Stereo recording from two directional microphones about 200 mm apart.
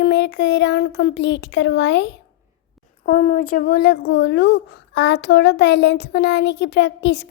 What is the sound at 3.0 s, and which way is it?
A woman's voice, 40° left (ahead or behind).